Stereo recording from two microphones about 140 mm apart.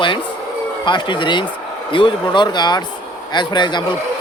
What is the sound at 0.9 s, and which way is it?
Speech, 35° left (ahead or behind).